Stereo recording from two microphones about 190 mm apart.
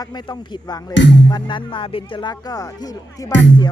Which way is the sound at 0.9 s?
70° left (ahead or behind).